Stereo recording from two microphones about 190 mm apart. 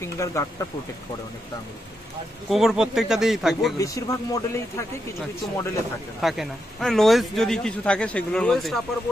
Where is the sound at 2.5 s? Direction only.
Centre (ahead or behind).